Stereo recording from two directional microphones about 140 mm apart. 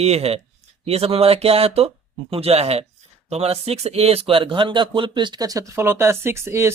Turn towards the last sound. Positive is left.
turn(degrees=-20)  # may be behind; listen again after turning